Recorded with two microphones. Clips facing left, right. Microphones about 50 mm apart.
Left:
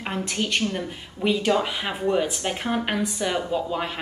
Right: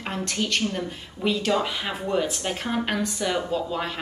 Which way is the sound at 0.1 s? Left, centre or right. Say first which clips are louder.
Even; centre.